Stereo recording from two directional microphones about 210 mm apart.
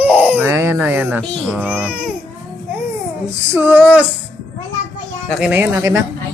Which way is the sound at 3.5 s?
10° right (ahead or behind).